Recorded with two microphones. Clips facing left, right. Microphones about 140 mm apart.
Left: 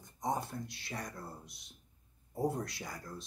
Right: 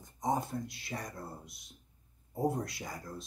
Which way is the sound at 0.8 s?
25° right (ahead or behind).